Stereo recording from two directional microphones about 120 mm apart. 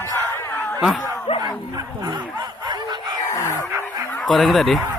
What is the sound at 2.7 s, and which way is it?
Snicker, 40° right (ahead or behind).